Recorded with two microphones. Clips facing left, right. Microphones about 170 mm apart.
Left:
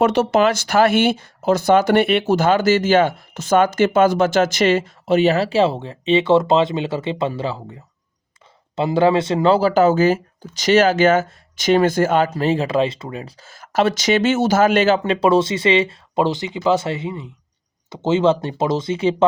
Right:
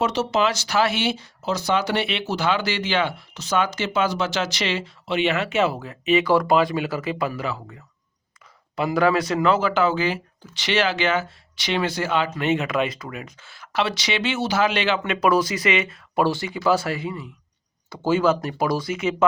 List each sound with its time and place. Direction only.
0.0 s speech: 55° left (ahead or behind); by 19.1 s 30° left (ahead or behind)